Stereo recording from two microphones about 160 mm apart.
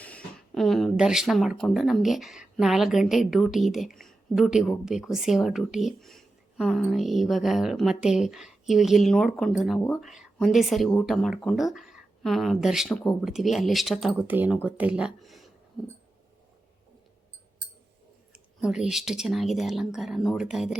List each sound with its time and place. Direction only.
0.0 s speech: 10° left (ahead or behind)
18.6 s speech: 5° right (ahead or behind)